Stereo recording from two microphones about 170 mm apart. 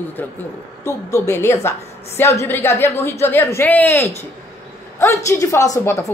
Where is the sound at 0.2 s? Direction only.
10° left (ahead or behind).